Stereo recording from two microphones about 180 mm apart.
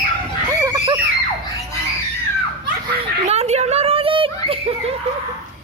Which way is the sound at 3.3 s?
35° right (ahead or behind).